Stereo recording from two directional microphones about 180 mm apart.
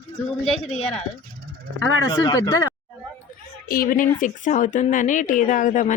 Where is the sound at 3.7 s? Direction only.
50° left (ahead or behind).